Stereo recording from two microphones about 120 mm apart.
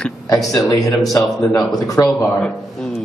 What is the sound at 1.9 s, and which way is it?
Speech, 30° left (ahead or behind).